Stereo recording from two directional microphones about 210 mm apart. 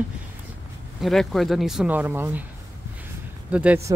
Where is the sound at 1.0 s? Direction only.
Centre (ahead or behind).